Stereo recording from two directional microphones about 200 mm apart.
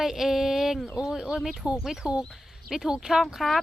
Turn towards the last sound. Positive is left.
turn(degrees=0)  # may be behind; listen again after turning